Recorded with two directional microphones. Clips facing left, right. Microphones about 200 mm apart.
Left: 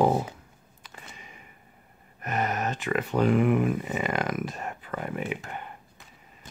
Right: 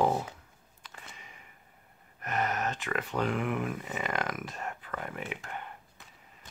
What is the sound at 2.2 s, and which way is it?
Speech, 15° left (ahead or behind).